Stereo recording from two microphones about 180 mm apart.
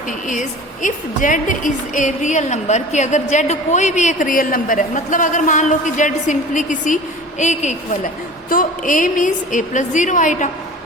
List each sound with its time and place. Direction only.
0.3 s a woman's voice: 45° left (ahead or behind)